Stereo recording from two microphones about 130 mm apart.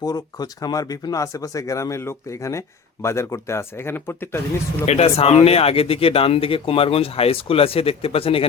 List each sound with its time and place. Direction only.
0.0 s speech: 30° left (ahead or behind)
4.9 s speech: 55° left (ahead or behind)